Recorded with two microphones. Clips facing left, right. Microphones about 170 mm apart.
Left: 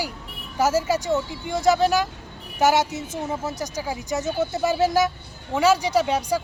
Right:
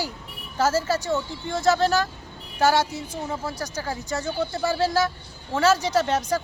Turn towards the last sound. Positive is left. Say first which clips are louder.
# left 1 dB
turn(degrees=10)  # may be behind; listen again after turning